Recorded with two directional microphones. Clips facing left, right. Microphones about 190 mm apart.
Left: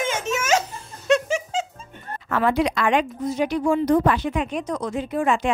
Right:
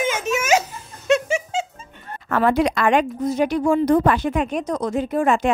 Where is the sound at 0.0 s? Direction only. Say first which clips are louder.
Right 3 dB; 10° right (ahead or behind).